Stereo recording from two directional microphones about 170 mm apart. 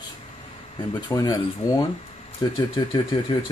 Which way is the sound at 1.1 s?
20° left (ahead or behind).